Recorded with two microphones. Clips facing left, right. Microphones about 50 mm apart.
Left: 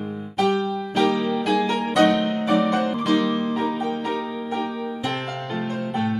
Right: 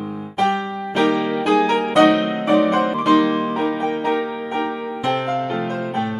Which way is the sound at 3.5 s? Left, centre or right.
Right.